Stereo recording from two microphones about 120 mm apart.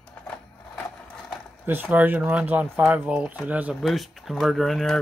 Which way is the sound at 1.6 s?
15° right (ahead or behind).